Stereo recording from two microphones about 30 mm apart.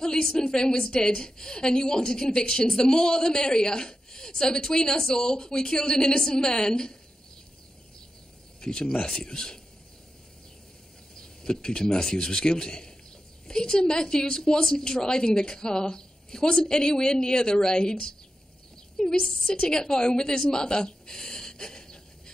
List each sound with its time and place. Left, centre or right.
0.0 s a woman's voice: left
8.5 s a woman's voice: left
11.1 s a man's voice: left